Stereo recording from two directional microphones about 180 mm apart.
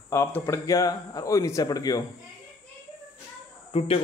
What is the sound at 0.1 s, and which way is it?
Speech, 15° left (ahead or behind).